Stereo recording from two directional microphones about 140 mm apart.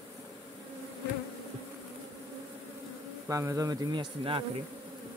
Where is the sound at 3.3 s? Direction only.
20° right (ahead or behind).